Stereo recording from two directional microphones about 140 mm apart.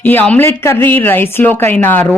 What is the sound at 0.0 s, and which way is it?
Speech, 15° left (ahead or behind).